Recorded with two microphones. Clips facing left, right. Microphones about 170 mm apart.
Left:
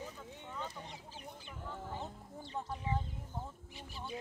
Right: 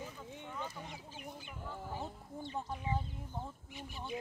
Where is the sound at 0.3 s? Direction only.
15° right (ahead or behind).